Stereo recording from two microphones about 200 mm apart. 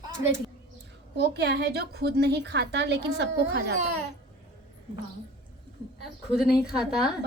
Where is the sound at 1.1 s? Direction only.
60° right (ahead or behind).